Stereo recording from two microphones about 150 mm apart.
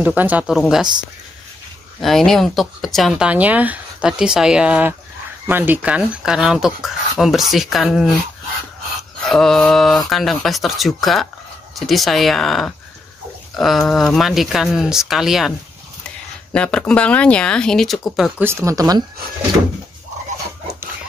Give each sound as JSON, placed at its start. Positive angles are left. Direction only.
{"t": 0.0, "sound": "speech", "side_deg": -10}
{"t": 2.0, "sound": "speech", "side_deg": 0}
{"t": 9.3, "sound": "speech", "side_deg": 0}
{"t": 16.5, "sound": "speech", "side_deg": 5}
{"t": 18.4, "sound": "speech", "side_deg": -15}